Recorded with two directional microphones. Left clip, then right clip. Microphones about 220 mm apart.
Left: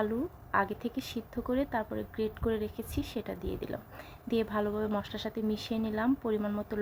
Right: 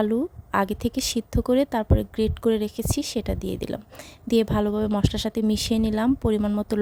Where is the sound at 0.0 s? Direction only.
50° right (ahead or behind).